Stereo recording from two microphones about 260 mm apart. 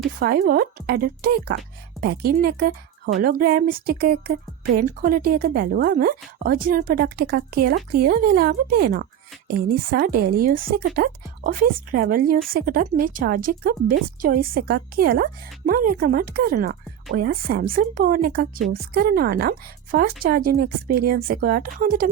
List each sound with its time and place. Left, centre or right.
0.2 s speech: right